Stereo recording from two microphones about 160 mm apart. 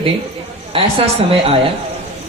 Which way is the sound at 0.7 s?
35° right (ahead or behind).